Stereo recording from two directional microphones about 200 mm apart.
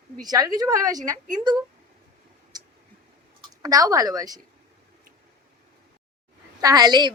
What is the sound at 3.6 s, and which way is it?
Speech, 20° right (ahead or behind).